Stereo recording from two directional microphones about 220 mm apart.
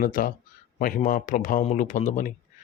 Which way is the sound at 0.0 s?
40° left (ahead or behind).